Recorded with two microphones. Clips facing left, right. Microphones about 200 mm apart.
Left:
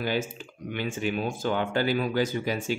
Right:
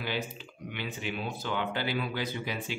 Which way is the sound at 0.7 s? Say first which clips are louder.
Left 7 dB; 45° left (ahead or behind).